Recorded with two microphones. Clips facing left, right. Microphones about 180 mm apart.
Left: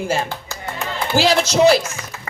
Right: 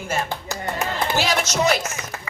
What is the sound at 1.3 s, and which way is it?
Speech, 30° left (ahead or behind).